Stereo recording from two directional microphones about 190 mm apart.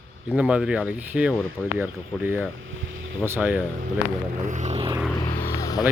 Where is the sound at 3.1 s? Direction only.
10° right (ahead or behind).